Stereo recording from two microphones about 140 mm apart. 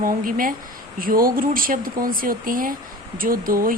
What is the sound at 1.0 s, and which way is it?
Speech, 90° right.